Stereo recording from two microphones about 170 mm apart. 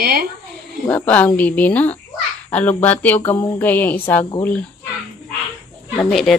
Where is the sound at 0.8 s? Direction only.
10° left (ahead or behind).